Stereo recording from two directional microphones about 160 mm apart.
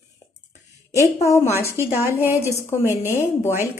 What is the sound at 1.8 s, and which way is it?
Speech, 15° right (ahead or behind).